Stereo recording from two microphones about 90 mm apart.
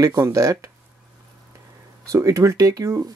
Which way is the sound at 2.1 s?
35° right (ahead or behind).